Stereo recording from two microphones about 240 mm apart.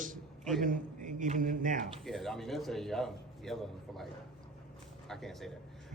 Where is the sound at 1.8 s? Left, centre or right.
Centre.